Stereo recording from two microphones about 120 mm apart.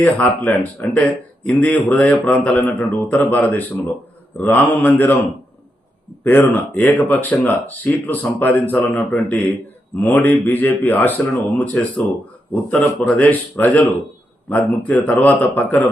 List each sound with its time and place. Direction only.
0.0 s speech: 15° left (ahead or behind)
6.2 s speech: 15° left (ahead or behind)
13.1 s speech: 10° left (ahead or behind)